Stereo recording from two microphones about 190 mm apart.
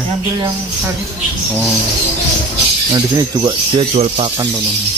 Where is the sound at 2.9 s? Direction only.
20° right (ahead or behind).